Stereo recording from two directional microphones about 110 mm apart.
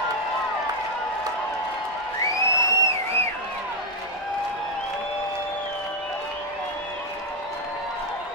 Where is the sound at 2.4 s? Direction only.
25° left (ahead or behind).